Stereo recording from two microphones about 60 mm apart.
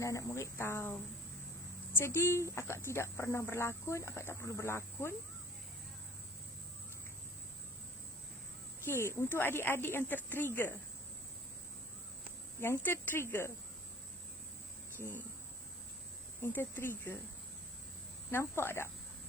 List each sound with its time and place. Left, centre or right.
0.0 s speech: left
8.8 s speech: left
12.5 s speech: left
14.9 s speech: left
16.5 s speech: left
18.3 s speech: left